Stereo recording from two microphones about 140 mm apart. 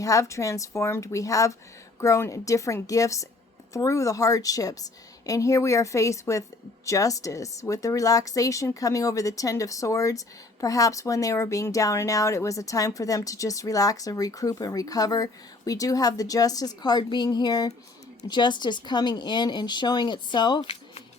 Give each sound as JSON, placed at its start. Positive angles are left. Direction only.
{"t": 0.0, "sound": "a woman's voice", "side_deg": 25}
{"t": 20.6, "sound": "speech", "side_deg": 45}